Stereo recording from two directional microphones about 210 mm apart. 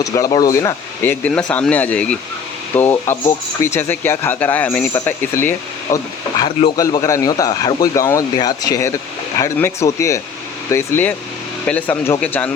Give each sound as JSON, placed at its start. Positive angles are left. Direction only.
{"t": 0.0, "sound": "speech", "side_deg": 15}
{"t": 6.4, "sound": "speech", "side_deg": 20}